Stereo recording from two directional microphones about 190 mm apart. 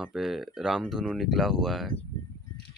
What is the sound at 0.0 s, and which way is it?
Speech, centre (ahead or behind).